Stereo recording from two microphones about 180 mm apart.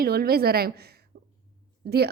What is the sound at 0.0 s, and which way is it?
A woman's voice, 60° right (ahead or behind).